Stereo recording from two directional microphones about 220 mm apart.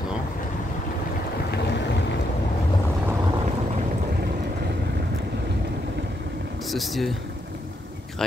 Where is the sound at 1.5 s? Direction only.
50° left (ahead or behind).